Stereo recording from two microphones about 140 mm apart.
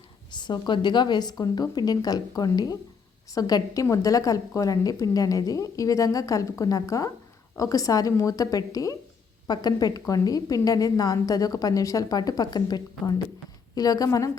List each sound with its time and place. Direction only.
0.3 s a woman's voice: 35° left (ahead or behind)